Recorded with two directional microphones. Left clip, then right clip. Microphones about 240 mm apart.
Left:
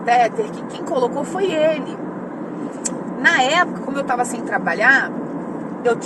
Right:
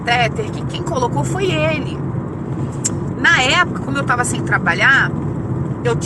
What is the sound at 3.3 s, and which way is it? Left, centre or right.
Speech, centre.